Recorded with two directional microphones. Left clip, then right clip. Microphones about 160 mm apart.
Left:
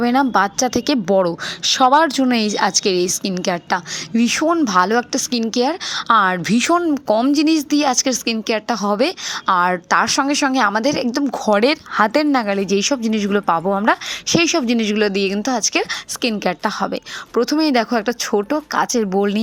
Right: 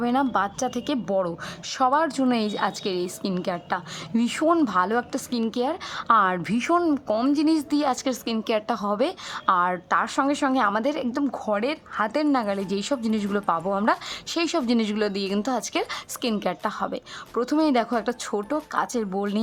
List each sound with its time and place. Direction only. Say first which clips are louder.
0.0 s a woman's voice: left 8 dB; 25° left (ahead or behind)
7.1 s speech: left 10 dB; 5° left (ahead or behind)
7.3 s a woman's voice: left 6 dB; 20° left (ahead or behind)
11.5 s a woman's voice: left 12 dB; 30° left (ahead or behind)
13.0 s speech: left 7 dB; 30° right (ahead or behind)
13.2 s a woman's voice: left 9 dB; 20° left (ahead or behind)